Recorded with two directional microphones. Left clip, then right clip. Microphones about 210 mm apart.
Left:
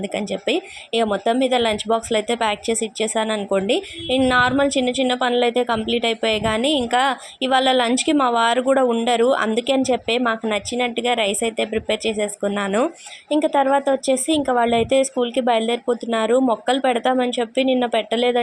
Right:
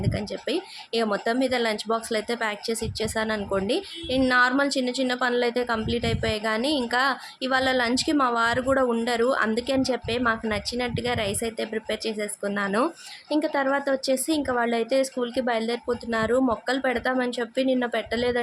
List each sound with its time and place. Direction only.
0.4 s speech: 10° left (ahead or behind)
4.7 s a woman's voice: 20° right (ahead or behind)
5.0 s speech: 10° left (ahead or behind)
14.1 s speech: 15° right (ahead or behind)
14.4 s speech: 10° left (ahead or behind)